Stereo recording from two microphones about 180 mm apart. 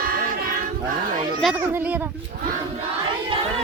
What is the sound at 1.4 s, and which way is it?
Speech, 10° right (ahead or behind).